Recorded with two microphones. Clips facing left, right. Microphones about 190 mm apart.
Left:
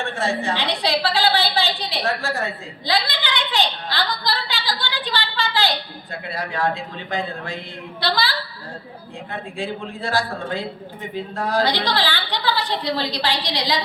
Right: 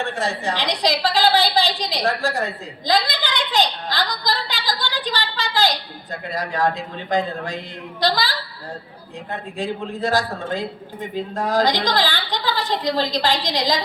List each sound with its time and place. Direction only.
0.2 s a woman's voice: 40° right (ahead or behind)
9.6 s a woman's voice: 40° right (ahead or behind)